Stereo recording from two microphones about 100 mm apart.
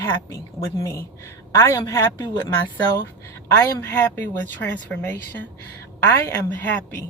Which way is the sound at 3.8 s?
20° left (ahead or behind).